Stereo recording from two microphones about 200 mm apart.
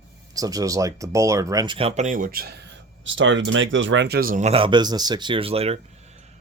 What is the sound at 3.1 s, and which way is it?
Speech, 70° right (ahead or behind).